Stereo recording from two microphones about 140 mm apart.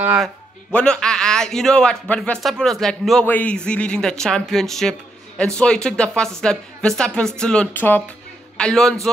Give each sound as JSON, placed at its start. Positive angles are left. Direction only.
{"t": 0.7, "sound": "a man's voice", "side_deg": 5}